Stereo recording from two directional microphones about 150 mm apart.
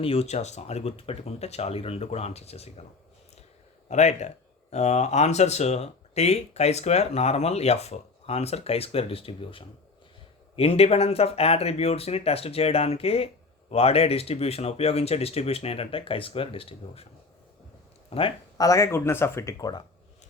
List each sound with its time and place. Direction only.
0.0 s speech: 40° left (ahead or behind)
3.8 s speech: 50° left (ahead or behind)
18.1 s speech: 35° left (ahead or behind)
18.5 s speech: 25° left (ahead or behind)